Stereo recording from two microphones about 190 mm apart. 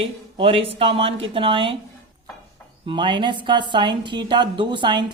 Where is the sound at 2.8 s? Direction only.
25° right (ahead or behind).